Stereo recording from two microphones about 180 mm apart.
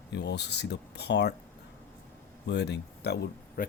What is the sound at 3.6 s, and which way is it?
Speech, 50° left (ahead or behind).